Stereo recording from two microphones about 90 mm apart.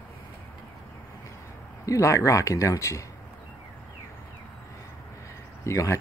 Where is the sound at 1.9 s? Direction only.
35° left (ahead or behind).